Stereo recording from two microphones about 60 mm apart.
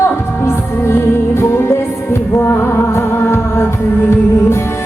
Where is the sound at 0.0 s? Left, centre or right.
Left.